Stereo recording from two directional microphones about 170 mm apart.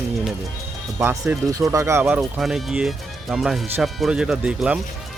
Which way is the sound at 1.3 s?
10° right (ahead or behind).